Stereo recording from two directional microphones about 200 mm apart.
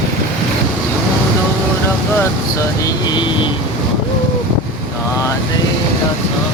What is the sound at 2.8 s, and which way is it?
Speech, 20° left (ahead or behind).